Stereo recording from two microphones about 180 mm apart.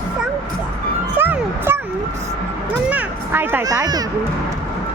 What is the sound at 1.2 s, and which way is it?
Music, 10° right (ahead or behind).